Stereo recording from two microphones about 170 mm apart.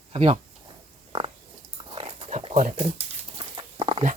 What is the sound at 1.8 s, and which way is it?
Dog, 35° right (ahead or behind).